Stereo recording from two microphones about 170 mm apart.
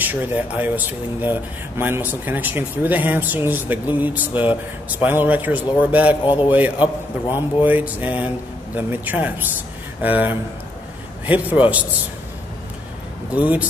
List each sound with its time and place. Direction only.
0.0 s speech: 10° right (ahead or behind)
6.2 s a man's voice: 30° left (ahead or behind)
6.5 s speech: 10° right (ahead or behind)
13.3 s speech: 10° right (ahead or behind)